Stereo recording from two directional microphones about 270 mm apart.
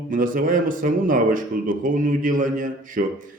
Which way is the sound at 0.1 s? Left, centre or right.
Right.